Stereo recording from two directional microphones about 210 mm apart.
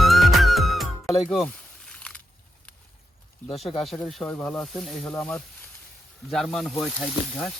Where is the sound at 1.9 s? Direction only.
5° left (ahead or behind).